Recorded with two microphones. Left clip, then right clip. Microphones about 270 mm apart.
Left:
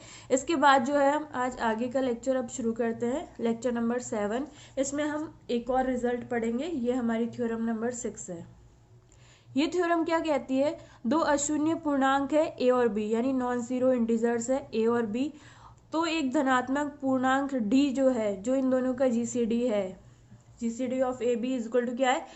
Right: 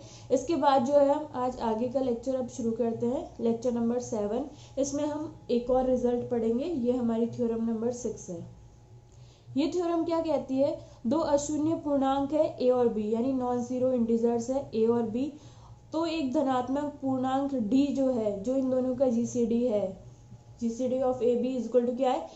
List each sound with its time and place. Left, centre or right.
0.3 s a woman's voice: left
9.6 s a woman's voice: left